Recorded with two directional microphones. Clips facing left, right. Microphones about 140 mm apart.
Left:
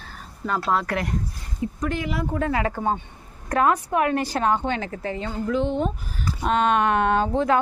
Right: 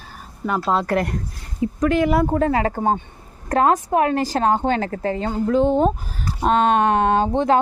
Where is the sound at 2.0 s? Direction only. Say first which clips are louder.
Right 9 dB; 55° right (ahead or behind).